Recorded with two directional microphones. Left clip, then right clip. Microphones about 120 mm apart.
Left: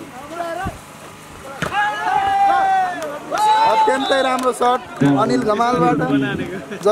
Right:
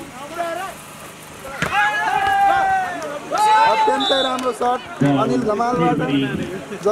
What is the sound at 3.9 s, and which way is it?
Speech, 40° left (ahead or behind).